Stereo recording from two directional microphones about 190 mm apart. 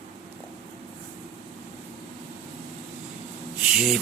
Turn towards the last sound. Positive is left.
turn(degrees=0)  # may be behind; listen again after turning